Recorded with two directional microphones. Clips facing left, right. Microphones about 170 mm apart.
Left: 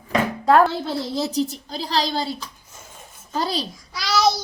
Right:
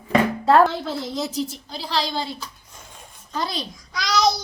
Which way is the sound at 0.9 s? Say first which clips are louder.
Left 2 dB; 30° left (ahead or behind).